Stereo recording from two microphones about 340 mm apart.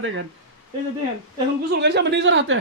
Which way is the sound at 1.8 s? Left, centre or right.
Right.